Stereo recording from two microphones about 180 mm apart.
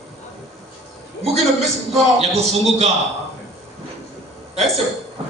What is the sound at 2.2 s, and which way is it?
Speech, 35° right (ahead or behind).